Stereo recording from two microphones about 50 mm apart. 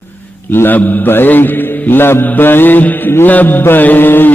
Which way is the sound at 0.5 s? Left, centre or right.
Left.